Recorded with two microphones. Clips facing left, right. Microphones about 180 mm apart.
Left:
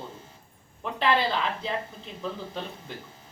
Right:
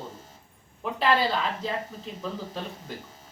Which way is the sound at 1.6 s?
40° right (ahead or behind).